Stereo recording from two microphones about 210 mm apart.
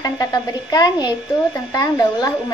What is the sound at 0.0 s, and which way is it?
A woman's voice, 20° left (ahead or behind).